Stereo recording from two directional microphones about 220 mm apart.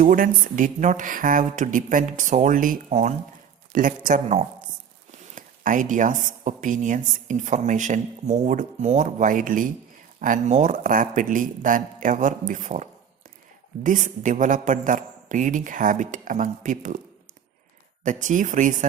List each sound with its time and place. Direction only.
0.0 s speech: 40° right (ahead or behind)
18.0 s speech: 35° right (ahead or behind)